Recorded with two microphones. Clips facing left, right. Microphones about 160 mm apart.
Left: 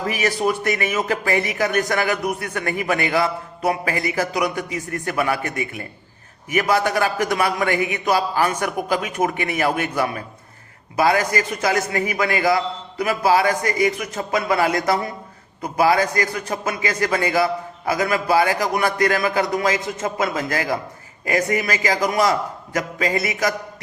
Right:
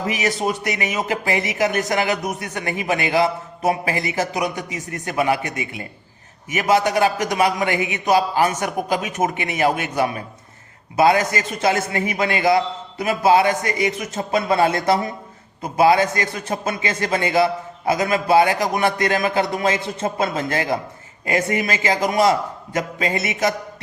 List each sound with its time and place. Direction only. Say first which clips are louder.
0.0 s a man's voice: left 1 dB; 20° right (ahead or behind)